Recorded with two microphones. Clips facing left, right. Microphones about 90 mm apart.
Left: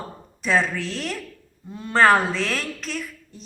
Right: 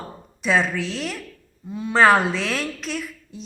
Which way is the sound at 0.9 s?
5° right (ahead or behind).